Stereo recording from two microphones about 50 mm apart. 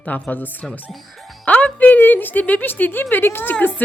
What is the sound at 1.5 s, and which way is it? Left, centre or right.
A woman's voice, left.